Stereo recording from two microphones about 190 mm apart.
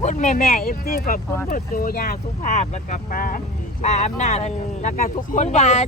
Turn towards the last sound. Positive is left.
turn(degrees=35)  # may be behind; listen again after turning